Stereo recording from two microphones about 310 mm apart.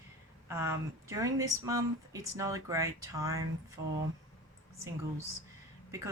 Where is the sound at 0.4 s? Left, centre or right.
Centre.